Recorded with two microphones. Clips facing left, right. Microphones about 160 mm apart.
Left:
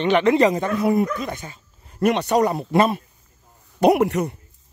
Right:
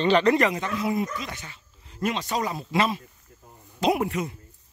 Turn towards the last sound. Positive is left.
turn(degrees=70)  # may be behind; listen again after turning